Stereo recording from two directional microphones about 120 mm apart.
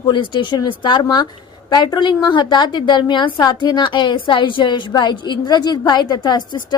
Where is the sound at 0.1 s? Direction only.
40° left (ahead or behind).